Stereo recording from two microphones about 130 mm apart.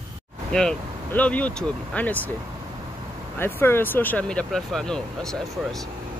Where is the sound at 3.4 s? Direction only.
15° left (ahead or behind).